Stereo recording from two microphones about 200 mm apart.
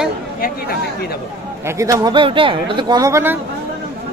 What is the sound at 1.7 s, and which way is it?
Speech, 15° right (ahead or behind).